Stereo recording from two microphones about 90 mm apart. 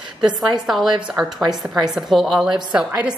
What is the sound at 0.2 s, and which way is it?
A woman's voice, 5° right (ahead or behind).